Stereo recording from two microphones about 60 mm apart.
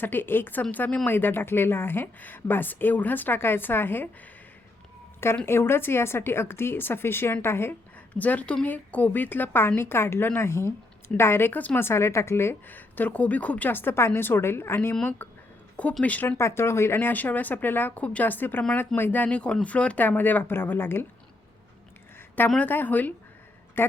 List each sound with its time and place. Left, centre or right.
0.0 s speech: left
0.6 s speech: left
1.0 s speech: left
5.5 s speech: left
8.2 s speech: left
11.5 s speech: left
11.9 s speech: left
12.6 s speech: left
16.4 s speech: left
17.1 s speech: left
20.1 s speech: left
22.6 s speech: left
23.8 s a woman's voice: left